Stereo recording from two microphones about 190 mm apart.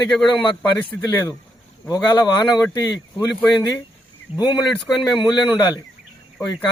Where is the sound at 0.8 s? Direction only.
15° left (ahead or behind).